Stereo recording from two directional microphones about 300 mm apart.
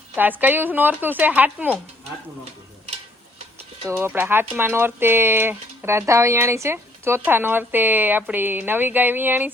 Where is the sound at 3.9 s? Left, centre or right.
Centre.